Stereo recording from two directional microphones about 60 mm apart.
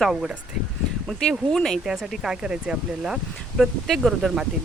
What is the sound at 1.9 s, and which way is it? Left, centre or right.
Speech, centre.